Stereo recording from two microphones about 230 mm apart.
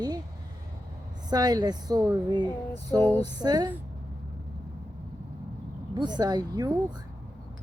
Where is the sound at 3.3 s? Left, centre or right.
Centre.